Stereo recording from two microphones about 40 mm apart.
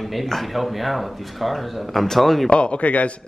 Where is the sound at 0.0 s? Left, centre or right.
Centre.